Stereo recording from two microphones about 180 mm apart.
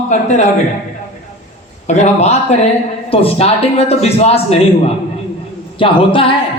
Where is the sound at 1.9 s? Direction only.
40° left (ahead or behind).